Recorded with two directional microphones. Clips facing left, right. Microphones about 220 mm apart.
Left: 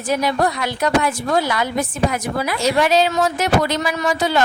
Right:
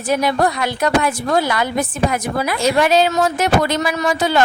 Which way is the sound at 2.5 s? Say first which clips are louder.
Right 2 dB; 50° right (ahead or behind).